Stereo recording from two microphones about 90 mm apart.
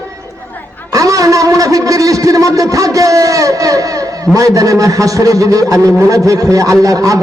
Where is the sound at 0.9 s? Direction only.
40° right (ahead or behind).